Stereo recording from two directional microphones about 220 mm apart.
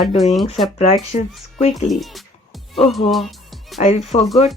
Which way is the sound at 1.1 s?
35° left (ahead or behind).